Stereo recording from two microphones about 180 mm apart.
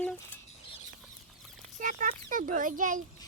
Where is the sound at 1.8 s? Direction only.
45° right (ahead or behind).